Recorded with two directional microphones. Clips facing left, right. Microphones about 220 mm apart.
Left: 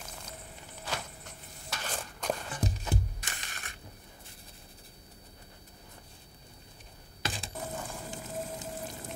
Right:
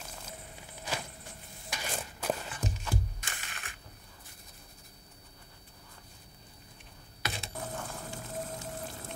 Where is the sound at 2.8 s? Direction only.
20° left (ahead or behind).